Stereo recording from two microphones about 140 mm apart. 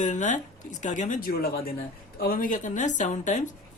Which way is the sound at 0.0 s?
65° left (ahead or behind).